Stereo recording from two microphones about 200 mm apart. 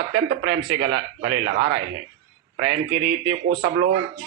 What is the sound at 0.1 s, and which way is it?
A man's voice, 55° right (ahead or behind).